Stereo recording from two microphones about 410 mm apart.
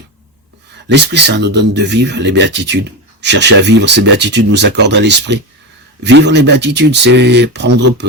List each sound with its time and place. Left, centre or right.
0.9 s speech: right